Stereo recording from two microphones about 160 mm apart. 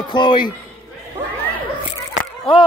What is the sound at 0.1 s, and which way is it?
Speech, 30° left (ahead or behind).